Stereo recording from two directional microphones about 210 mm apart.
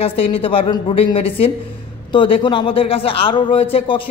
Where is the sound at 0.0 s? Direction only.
25° left (ahead or behind).